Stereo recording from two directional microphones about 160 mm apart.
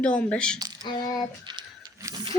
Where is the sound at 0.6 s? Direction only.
25° right (ahead or behind).